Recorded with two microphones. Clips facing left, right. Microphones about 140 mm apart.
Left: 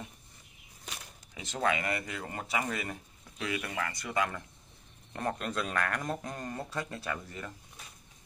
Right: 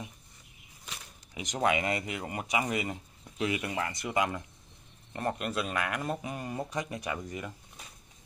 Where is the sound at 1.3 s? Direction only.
15° right (ahead or behind).